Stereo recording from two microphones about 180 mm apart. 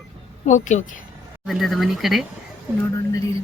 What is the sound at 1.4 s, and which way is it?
Speech, centre (ahead or behind).